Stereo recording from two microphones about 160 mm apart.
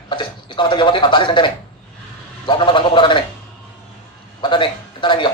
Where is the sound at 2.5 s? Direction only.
30° left (ahead or behind).